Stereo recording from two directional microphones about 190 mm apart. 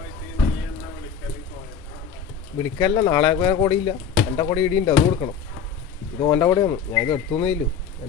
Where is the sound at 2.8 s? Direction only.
20° left (ahead or behind).